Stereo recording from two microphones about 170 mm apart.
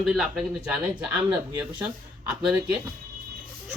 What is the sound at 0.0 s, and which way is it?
Speech, 5° right (ahead or behind).